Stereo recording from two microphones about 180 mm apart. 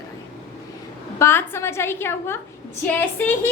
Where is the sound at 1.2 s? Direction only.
15° left (ahead or behind).